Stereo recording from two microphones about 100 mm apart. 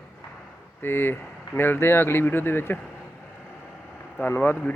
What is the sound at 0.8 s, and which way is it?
Speech, 20° left (ahead or behind).